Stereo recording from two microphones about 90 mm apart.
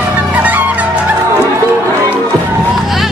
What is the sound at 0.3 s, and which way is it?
Music, 20° right (ahead or behind).